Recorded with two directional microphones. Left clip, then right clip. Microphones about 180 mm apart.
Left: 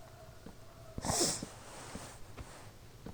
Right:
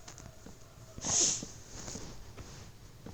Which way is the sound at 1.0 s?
30° left (ahead or behind).